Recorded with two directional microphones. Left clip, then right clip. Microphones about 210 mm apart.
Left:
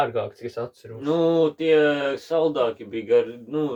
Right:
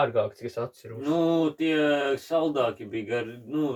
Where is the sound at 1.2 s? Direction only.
50° left (ahead or behind).